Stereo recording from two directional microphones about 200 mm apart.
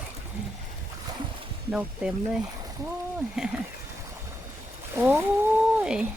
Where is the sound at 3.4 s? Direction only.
5° right (ahead or behind).